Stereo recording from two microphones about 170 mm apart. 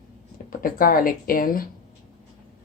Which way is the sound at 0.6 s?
55° left (ahead or behind).